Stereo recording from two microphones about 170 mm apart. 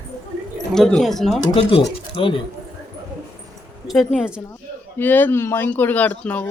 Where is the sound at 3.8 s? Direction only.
Centre (ahead or behind).